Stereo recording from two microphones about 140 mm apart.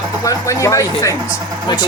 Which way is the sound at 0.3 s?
20° left (ahead or behind).